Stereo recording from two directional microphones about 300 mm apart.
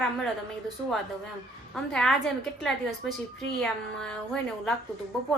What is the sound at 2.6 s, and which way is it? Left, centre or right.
A woman's voice, centre.